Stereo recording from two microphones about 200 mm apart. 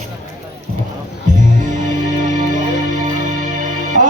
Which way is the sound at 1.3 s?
40° right (ahead or behind).